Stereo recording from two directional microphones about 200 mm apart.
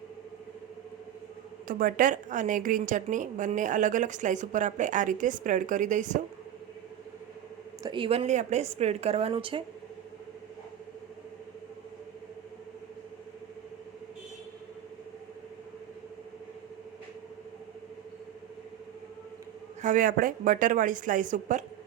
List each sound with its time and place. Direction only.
1.6 s a woman's voice: 40° right (ahead or behind)
7.8 s a woman's voice: 25° right (ahead or behind)
19.8 s a woman's voice: 40° right (ahead or behind)